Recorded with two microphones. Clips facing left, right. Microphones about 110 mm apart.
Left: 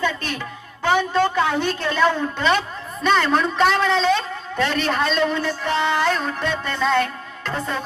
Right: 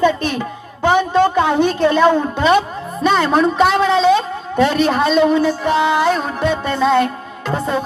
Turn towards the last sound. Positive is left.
turn(degrees=-10)  # may be behind; listen again after turning